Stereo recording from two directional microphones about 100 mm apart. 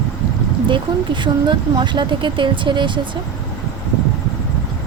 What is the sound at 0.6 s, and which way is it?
A woman's voice, 55° right (ahead or behind).